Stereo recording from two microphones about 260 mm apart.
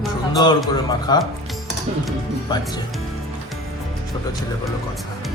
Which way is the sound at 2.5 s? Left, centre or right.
Centre.